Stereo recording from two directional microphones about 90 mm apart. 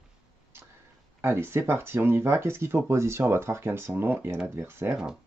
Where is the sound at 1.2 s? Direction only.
25° right (ahead or behind).